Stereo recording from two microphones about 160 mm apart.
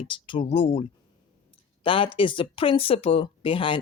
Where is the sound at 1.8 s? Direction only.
35° left (ahead or behind).